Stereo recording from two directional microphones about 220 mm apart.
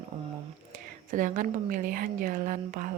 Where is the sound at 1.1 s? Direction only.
35° right (ahead or behind).